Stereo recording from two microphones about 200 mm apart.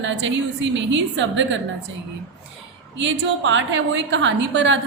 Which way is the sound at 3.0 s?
65° right (ahead or behind).